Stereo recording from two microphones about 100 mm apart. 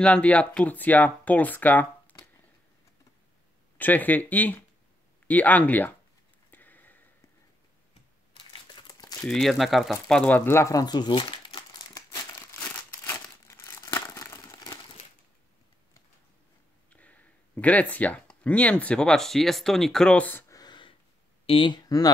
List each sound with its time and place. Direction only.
0.0 s speech: 10° left (ahead or behind)
3.7 s speech: 15° left (ahead or behind)
6.5 s a sound: 15° left (ahead or behind)
8.7 s crumpling: 45° left (ahead or behind)
9.2 s speech: 5° left (ahead or behind)
10.3 s speech: 25° left (ahead or behind); by 11.6 s 50° left (ahead or behind)
13.0 s crumpling: 25° left (ahead or behind)
16.9 s speech: 15° left (ahead or behind)
20.4 s a sound: 35° left (ahead or behind)
21.5 s speech: 55° left (ahead or behind); by 22.1 s 40° left (ahead or behind)